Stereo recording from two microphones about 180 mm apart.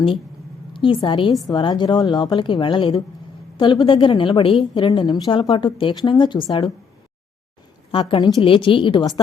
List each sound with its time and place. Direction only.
0.7 s a woman's voice: 25° left (ahead or behind)
7.9 s a woman's voice: 30° left (ahead or behind)